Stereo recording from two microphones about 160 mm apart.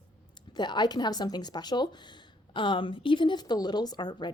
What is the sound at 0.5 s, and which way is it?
A woman's voice, 25° left (ahead or behind).